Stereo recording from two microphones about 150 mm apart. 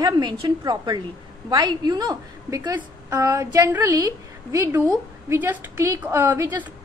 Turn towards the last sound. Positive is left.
turn(degrees=-15)  # may be behind; listen again after turning